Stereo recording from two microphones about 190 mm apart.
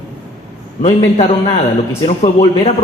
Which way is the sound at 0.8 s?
30° left (ahead or behind).